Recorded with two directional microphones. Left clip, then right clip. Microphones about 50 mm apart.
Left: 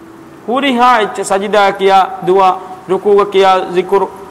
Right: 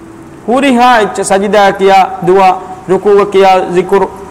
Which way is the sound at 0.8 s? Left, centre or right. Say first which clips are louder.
Right 1 dB; right.